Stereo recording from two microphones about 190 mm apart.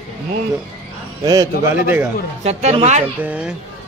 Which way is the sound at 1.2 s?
20° right (ahead or behind).